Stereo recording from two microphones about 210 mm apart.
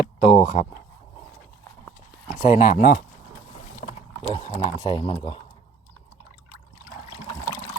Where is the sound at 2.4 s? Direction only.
40° left (ahead or behind).